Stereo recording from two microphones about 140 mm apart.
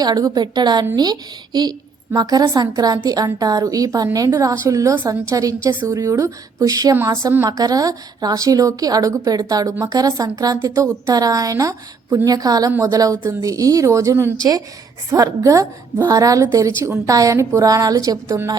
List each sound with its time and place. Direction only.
0.0 s a woman's voice: 25° right (ahead or behind)